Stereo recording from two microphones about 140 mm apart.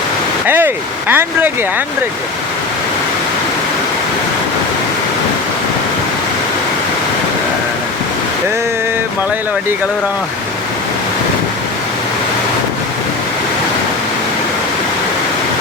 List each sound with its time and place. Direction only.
0.4 s speech: 15° right (ahead or behind)